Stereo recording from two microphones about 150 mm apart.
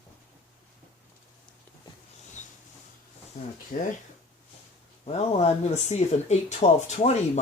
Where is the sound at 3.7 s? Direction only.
70° left (ahead or behind).